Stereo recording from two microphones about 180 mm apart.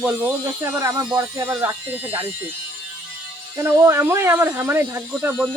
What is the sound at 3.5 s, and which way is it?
Speech, 15° right (ahead or behind).